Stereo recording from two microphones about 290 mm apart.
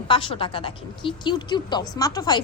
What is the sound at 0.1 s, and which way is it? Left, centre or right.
A woman's voice, centre.